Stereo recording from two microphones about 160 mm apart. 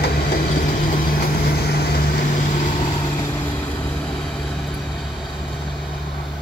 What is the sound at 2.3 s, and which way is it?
Vehicle, 50° left (ahead or behind).